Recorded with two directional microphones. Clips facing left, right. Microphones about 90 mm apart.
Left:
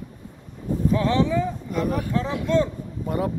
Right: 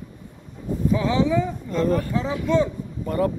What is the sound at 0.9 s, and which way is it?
Speech, 5° right (ahead or behind).